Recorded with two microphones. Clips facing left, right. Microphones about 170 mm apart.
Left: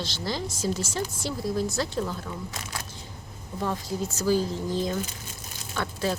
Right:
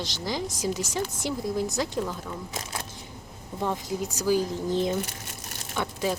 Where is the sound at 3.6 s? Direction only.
20° right (ahead or behind).